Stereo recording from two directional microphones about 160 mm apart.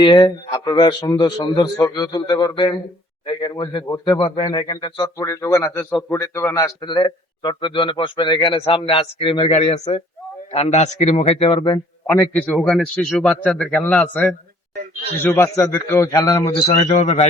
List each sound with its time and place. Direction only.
0.0 s a man's voice: 25° left (ahead or behind)
12.0 s a man's voice: 10° left (ahead or behind)
16.5 s a man's voice: 35° left (ahead or behind)